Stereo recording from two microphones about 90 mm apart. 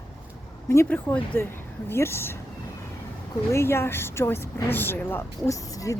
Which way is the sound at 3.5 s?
30° left (ahead or behind).